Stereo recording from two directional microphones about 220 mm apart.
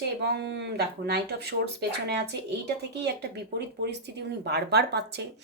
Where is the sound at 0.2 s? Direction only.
50° right (ahead or behind).